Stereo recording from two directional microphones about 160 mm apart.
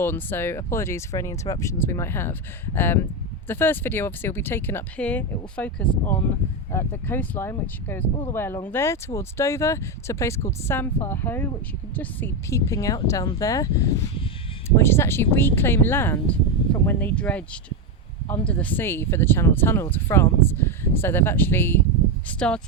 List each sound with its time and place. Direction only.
0.0 s a woman's voice: 15° left (ahead or behind)